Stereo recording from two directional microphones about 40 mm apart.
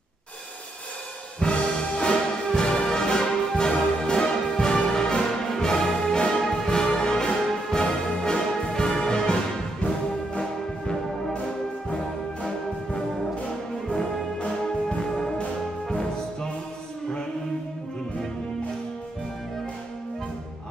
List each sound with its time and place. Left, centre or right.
1.4 s music: left
5.6 s brass instrument: centre
6.8 s music: centre
14.4 s music: left